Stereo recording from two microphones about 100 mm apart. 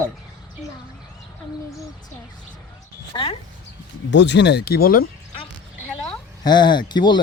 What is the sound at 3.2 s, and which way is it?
Speech, 65° left (ahead or behind).